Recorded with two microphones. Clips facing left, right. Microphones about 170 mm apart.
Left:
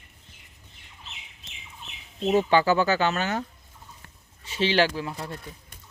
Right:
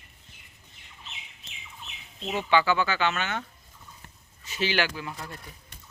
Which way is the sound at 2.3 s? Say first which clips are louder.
Left 4 dB; 40° left (ahead or behind).